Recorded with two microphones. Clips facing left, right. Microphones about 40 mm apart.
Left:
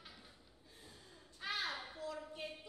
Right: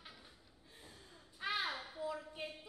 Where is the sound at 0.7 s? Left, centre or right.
Right.